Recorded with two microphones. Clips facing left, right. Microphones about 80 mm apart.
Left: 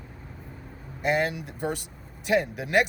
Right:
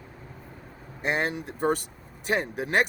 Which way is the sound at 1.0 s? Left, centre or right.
Right.